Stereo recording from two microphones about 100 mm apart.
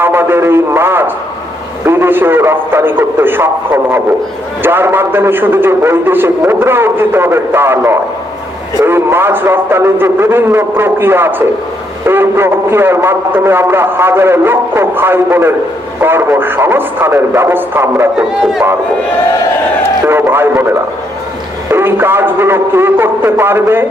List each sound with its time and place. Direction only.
0.0 s radio: 20° right (ahead or behind)
1.8 s a man's voice: 25° right (ahead or behind)
18.2 s speech: 5° right (ahead or behind)
20.1 s a man's voice: 25° right (ahead or behind)